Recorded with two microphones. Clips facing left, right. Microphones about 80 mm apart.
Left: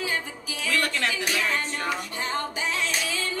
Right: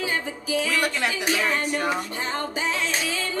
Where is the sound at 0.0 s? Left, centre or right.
Right.